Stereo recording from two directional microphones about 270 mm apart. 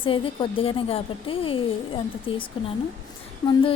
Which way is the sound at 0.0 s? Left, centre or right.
Centre.